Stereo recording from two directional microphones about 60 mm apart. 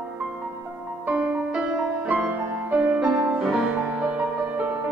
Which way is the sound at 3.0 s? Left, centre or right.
Centre.